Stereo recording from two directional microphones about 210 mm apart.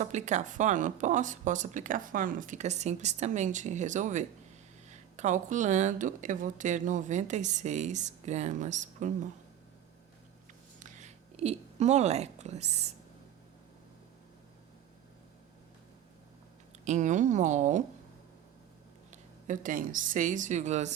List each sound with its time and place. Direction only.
0.0 s speech: 35° right (ahead or behind)
10.8 s a sound: 35° right (ahead or behind)
16.8 s speech: 35° right (ahead or behind)
19.1 s a woman's voice: 40° right (ahead or behind)